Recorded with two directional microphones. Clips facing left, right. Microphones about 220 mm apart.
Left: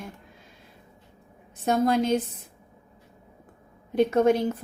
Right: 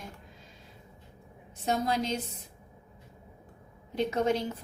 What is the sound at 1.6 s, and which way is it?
Speech, 55° left (ahead or behind).